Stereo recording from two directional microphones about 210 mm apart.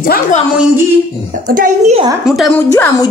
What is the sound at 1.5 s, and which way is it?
Speech, 40° right (ahead or behind).